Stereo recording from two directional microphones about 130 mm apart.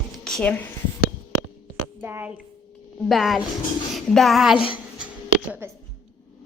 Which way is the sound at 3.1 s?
Centre (ahead or behind).